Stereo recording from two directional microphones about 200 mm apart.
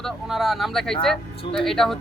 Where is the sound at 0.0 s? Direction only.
Centre (ahead or behind).